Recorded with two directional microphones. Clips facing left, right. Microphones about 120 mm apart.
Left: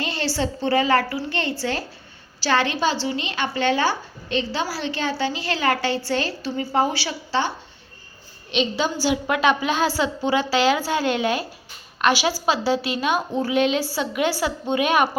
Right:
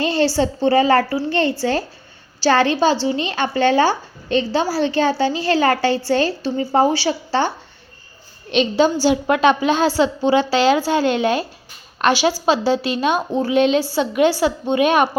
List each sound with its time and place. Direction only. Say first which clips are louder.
0.0 s speech: right 8 dB; 35° right (ahead or behind)
8.7 s a woman's voice: right 10 dB; 30° right (ahead or behind)